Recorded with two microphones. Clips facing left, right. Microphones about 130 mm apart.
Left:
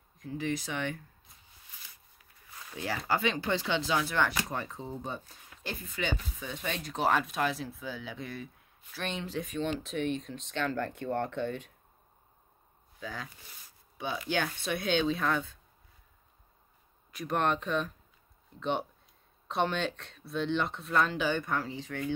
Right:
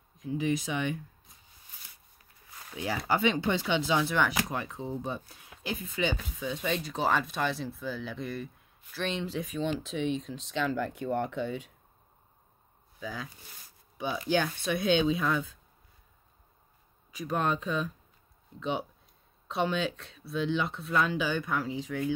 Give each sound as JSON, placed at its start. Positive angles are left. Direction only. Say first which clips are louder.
{"t": 0.2, "sound": "speech", "louder": "right 4 dB", "side_deg": -15}
{"t": 2.7, "sound": "speech", "louder": "right 2 dB", "side_deg": -15}
{"t": 13.0, "sound": "speech", "louder": "right 2 dB", "side_deg": -10}
{"t": 14.4, "sound": "speech", "louder": "right 3 dB", "side_deg": -10}
{"t": 17.2, "sound": "speech", "louder": "even", "side_deg": -5}